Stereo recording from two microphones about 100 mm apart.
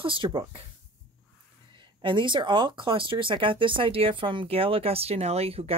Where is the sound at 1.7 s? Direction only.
55° right (ahead or behind).